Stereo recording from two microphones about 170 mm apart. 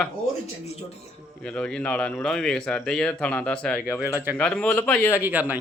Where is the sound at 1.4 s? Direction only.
5° left (ahead or behind).